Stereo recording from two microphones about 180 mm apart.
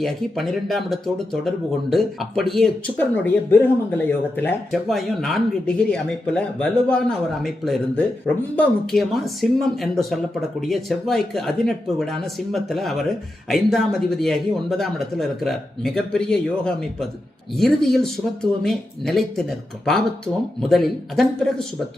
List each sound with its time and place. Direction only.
0.0 s speech: centre (ahead or behind)